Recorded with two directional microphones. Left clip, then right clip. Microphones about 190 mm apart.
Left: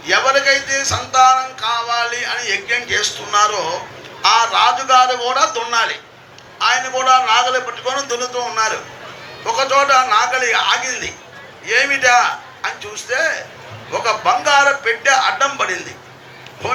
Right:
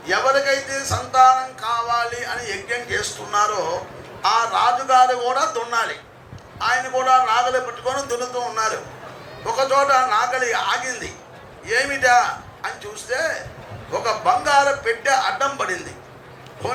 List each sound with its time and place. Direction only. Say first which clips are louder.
0.0 s a man's voice: left 4 dB; 30° right (ahead or behind)